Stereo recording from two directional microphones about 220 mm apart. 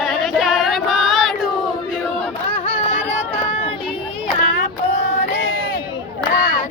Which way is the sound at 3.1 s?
25° left (ahead or behind).